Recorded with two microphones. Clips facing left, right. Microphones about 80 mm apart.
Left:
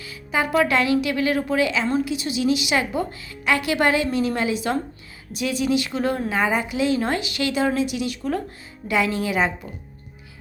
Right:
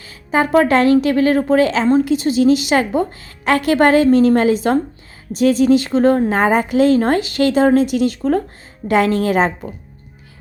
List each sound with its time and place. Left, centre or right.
0.0 s a woman's voice: right